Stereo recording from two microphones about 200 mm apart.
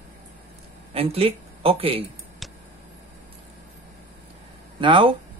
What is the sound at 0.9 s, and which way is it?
Speech, 30° right (ahead or behind).